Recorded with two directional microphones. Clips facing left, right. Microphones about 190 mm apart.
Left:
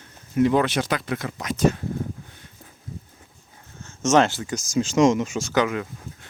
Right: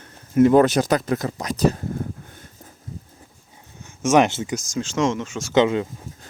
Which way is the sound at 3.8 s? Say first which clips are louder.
Right 2 dB; 15° right (ahead or behind).